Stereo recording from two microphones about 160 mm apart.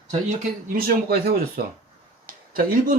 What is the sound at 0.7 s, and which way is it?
Speech, 65° right (ahead or behind).